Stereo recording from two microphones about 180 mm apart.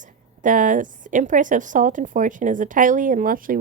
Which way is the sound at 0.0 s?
45° right (ahead or behind).